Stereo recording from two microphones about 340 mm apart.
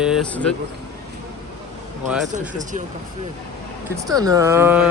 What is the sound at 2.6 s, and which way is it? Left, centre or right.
Speech, right.